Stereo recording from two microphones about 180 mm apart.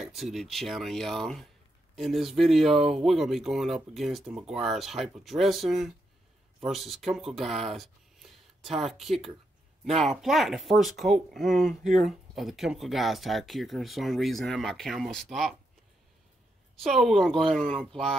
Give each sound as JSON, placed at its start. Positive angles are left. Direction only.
{"t": 0.0, "sound": "speech", "side_deg": 0}
{"t": 16.7, "sound": "speech", "side_deg": 0}